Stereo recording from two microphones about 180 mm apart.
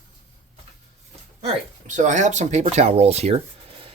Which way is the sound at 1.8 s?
45° right (ahead or behind).